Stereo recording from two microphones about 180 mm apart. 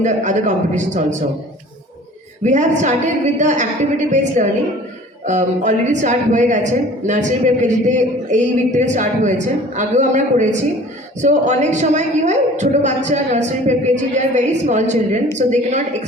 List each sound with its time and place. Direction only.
0.0 s a woman's voice: 40° right (ahead or behind)
2.4 s a woman's voice: 40° right (ahead or behind)